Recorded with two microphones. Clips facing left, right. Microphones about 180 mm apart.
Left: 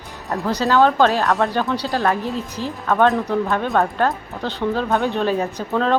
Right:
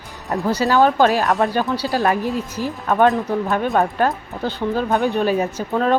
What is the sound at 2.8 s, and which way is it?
Speech, 15° right (ahead or behind).